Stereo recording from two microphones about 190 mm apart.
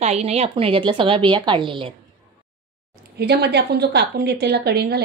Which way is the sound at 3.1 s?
60° right (ahead or behind).